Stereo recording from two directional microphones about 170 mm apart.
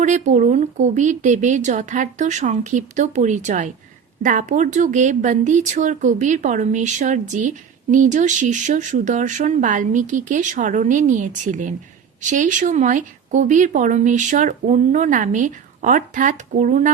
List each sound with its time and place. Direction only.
0.0 s speech: 45° right (ahead or behind)